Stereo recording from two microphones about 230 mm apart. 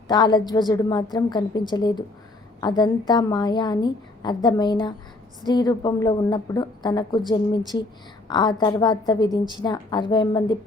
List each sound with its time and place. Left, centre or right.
0.1 s a woman's voice: centre
8.3 s a woman's voice: centre